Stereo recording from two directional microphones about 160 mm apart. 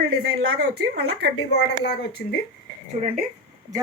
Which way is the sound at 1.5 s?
90° left.